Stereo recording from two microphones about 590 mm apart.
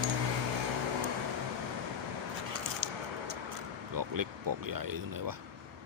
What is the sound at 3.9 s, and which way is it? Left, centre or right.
Speech, right.